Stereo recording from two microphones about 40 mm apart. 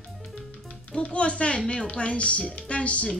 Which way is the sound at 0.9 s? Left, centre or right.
Left.